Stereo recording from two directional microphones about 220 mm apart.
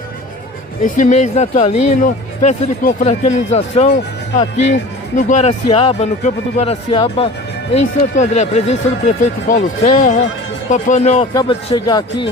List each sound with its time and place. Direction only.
0.8 s speech: 35° left (ahead or behind); by 12.3 s 20° left (ahead or behind)